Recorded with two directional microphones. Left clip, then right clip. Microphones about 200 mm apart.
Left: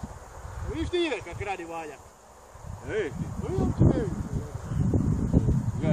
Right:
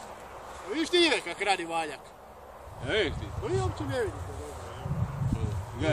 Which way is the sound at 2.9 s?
10° right (ahead or behind).